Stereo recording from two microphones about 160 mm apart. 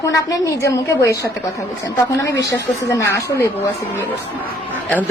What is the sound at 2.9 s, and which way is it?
Speech, 20° left (ahead or behind).